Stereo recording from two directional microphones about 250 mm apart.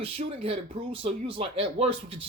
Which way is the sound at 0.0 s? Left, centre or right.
Right.